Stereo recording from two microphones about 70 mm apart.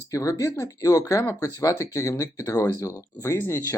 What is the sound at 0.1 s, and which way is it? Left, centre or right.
Speech, left.